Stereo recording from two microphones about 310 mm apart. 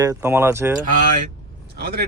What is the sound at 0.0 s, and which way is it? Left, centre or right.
Speech, centre.